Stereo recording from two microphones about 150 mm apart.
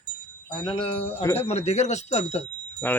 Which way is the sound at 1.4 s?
45° left (ahead or behind).